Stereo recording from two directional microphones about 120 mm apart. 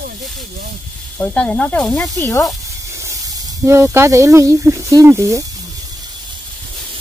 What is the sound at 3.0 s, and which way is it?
Speech, 25° right (ahead or behind).